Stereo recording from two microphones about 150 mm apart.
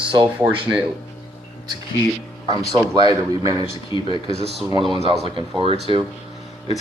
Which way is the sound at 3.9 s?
30° left (ahead or behind).